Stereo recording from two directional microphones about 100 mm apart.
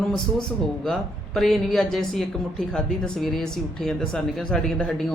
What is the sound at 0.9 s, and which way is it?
Speech, centre (ahead or behind).